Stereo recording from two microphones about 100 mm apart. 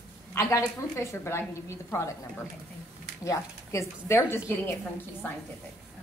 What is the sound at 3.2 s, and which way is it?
A woman's voice, 30° left (ahead or behind).